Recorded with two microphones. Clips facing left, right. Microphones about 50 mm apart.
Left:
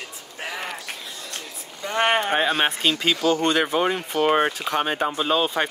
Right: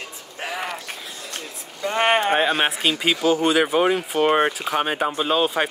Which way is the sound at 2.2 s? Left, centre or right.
Centre.